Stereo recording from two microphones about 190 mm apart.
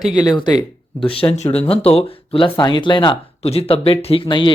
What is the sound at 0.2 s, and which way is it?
Speech, 20° left (ahead or behind).